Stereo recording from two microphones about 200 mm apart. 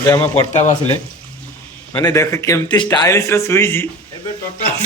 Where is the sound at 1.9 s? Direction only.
15° left (ahead or behind).